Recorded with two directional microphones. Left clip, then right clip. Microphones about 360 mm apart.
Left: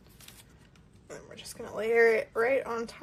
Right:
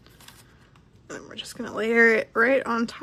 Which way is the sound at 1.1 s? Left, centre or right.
Right.